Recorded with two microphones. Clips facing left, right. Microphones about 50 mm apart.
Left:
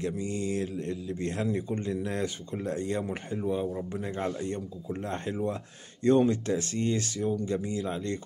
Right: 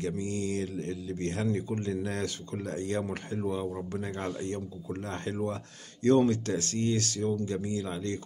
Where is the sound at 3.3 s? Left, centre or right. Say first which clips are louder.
Left 2 dB; centre.